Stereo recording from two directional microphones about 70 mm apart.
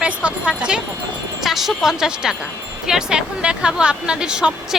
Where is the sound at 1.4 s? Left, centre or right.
Centre.